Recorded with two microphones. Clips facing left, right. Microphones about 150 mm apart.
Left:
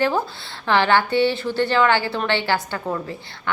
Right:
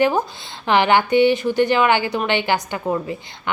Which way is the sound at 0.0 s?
15° right (ahead or behind).